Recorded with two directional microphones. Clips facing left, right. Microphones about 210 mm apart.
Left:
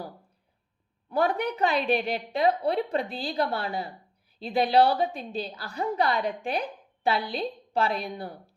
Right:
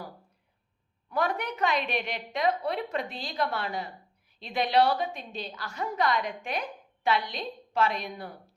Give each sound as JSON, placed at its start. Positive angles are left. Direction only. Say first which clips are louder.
{"t": 1.1, "sound": "a woman's voice", "louder": "left 4 dB", "side_deg": 30}